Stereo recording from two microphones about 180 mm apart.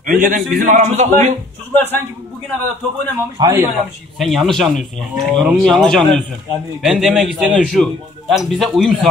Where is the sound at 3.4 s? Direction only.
15° right (ahead or behind).